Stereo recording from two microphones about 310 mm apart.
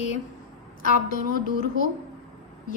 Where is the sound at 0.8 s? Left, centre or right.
Left.